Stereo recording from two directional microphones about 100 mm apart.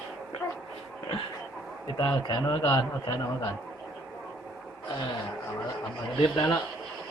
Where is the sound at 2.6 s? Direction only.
40° left (ahead or behind).